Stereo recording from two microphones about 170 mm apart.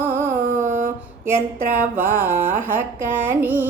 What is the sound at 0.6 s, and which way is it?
Mantra, 50° right (ahead or behind).